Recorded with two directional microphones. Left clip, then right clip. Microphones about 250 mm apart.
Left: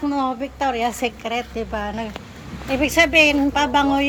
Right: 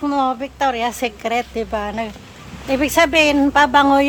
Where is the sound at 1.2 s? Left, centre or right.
Centre.